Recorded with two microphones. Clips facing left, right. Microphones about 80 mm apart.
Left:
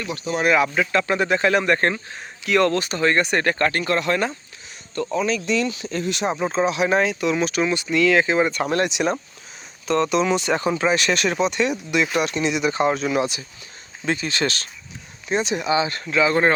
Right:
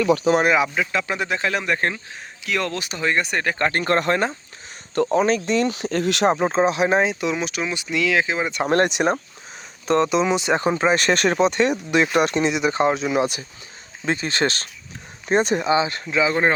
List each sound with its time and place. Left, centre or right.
0.4 s speech: centre
0.7 s speech: centre
3.7 s speech: right
4.1 s speech: right
5.1 s speech: right
5.7 s speech: right
6.4 s speech: right
7.3 s speech: centre
8.6 s speech: right
10.0 s speech: right
12.5 s speech: right
14.2 s speech: right
15.6 s speech: right